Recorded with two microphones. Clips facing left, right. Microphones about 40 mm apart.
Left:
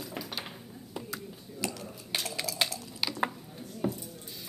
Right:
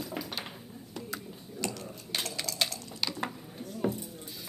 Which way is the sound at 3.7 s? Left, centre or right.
Centre.